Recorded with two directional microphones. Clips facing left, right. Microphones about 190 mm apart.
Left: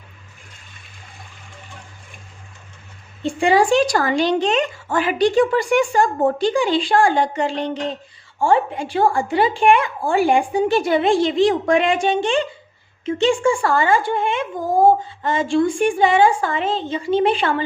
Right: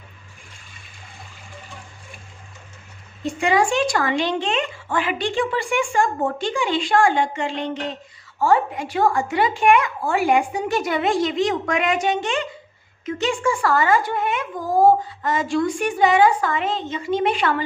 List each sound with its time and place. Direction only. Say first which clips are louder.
3.2 s speech: left 4 dB; 30° left (ahead or behind)